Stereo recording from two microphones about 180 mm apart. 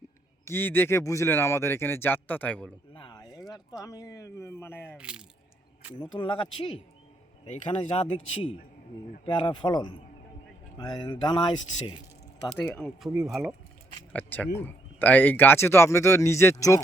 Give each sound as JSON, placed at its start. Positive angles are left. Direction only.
{"t": 0.4, "sound": "speech", "side_deg": 10}
{"t": 2.9, "sound": "speech", "side_deg": 25}
{"t": 4.9, "sound": "speech", "side_deg": -5}
{"t": 6.0, "sound": "speech", "side_deg": 25}
{"t": 12.5, "sound": "speech", "side_deg": 5}
{"t": 14.1, "sound": "speech", "side_deg": 10}